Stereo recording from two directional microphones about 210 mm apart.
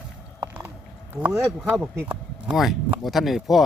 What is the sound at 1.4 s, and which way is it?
Speech, 5° left (ahead or behind).